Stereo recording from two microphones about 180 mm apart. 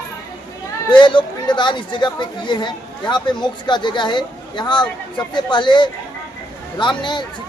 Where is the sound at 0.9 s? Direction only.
25° left (ahead or behind).